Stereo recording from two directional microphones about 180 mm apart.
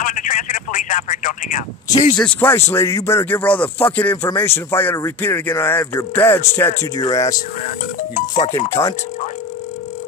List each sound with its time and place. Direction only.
0.0 s telephone: 45° left (ahead or behind)
2.1 s speech: 10° left (ahead or behind)